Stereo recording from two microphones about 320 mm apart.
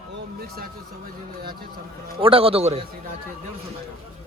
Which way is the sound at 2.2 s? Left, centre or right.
Centre.